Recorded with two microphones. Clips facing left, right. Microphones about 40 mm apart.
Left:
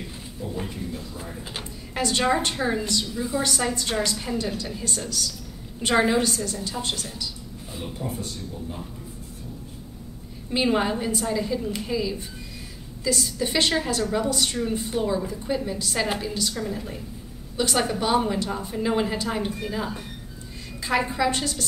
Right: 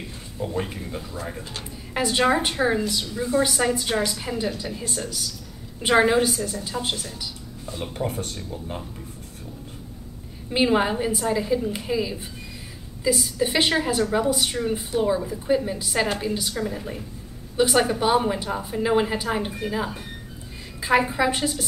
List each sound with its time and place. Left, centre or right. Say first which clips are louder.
0.4 s speech: right 4 dB; right
1.4 s speech: left 1 dB; centre
2.0 s a woman's voice: right 2 dB; centre
3.2 s a woman's voice: right 7 dB; centre
3.4 s a woman's voice: right 3 dB; centre
8.1 s speech: right 2 dB; right
10.5 s a woman's voice: right 2 dB; centre